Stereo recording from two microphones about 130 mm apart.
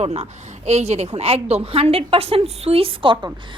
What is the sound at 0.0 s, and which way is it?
A woman's voice, 55° right (ahead or behind).